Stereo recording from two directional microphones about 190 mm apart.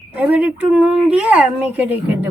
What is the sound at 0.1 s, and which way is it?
A woman's voice, 5° right (ahead or behind).